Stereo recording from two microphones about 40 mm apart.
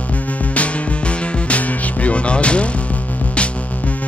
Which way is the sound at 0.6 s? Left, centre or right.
Left.